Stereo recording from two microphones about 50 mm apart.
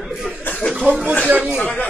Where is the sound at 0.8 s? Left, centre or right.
Right.